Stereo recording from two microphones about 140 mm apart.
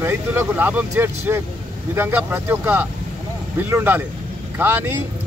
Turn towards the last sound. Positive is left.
turn(degrees=-15)  # may be behind; listen again after turning